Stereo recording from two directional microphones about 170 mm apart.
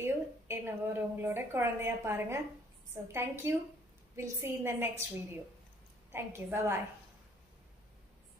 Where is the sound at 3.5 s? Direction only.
15° right (ahead or behind).